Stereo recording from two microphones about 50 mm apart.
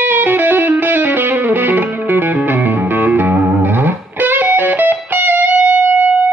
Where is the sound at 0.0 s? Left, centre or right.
Right.